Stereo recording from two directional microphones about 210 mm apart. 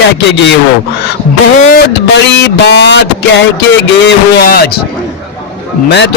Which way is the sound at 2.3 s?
55° left (ahead or behind).